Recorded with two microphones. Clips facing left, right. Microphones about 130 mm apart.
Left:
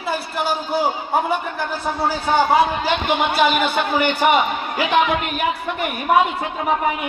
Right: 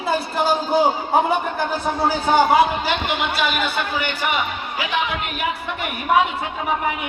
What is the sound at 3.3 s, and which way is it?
A man's voice, 50° left (ahead or behind).